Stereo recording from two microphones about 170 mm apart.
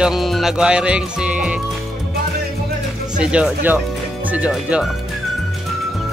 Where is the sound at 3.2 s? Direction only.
5° right (ahead or behind).